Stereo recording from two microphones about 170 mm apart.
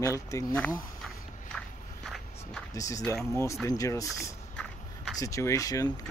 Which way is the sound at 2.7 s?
20° left (ahead or behind).